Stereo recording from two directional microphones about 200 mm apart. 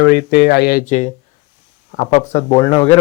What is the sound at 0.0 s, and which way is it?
Speech, 50° left (ahead or behind).